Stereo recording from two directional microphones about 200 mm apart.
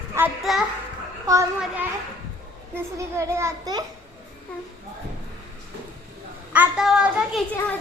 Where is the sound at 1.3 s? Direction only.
15° right (ahead or behind).